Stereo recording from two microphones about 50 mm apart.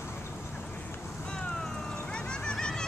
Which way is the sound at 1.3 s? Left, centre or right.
Centre.